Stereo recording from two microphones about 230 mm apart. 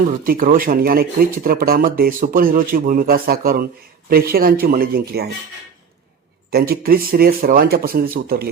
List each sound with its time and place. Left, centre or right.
0.3 s speech: right
6.5 s speech: right